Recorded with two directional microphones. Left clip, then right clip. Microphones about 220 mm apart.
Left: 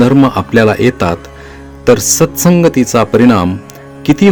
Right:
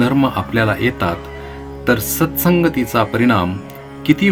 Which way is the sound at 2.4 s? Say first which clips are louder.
Left 4 dB; 45° left (ahead or behind).